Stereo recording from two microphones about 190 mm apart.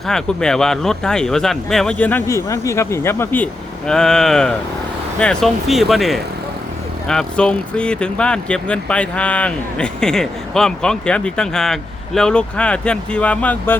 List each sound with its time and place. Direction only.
0.1 s speech: 5° left (ahead or behind)